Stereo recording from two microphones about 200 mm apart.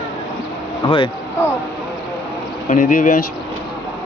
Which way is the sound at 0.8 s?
25° left (ahead or behind).